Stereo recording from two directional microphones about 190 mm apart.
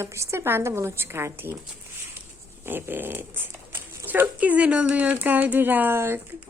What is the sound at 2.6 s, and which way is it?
Speech, 10° right (ahead or behind).